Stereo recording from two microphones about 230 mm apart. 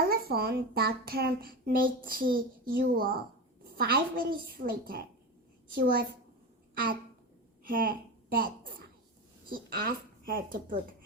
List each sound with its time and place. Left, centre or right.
0.1 s a child's voice: right
7.6 s a woman's voice: right